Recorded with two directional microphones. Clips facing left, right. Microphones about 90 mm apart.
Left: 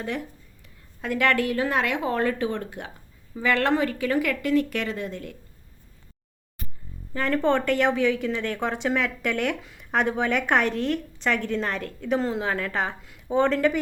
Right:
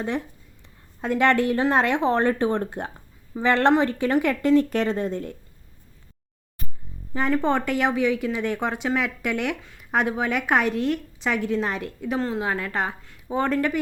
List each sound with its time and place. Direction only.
0.6 s a woman's voice: 25° right (ahead or behind)
7.1 s speech: 15° right (ahead or behind)